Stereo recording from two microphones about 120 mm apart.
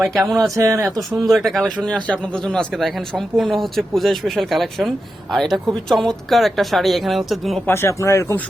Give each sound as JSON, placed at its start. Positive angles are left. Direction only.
{"t": 0.0, "sound": "speech", "side_deg": 0}
{"t": 0.5, "sound": "speech", "side_deg": -25}
{"t": 1.1, "sound": "speech", "side_deg": 0}
{"t": 7.7, "sound": "speech", "side_deg": 20}